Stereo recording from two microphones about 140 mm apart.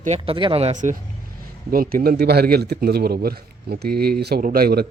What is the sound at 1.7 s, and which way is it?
A man's voice, 90° right.